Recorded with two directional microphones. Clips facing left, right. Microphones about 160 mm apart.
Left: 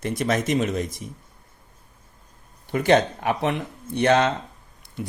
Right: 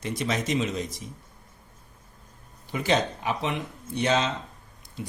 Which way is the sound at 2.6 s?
60° left (ahead or behind).